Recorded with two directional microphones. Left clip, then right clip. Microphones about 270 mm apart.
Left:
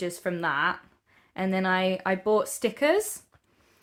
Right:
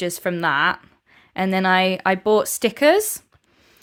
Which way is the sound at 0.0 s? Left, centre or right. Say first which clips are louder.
Right 7 dB; right.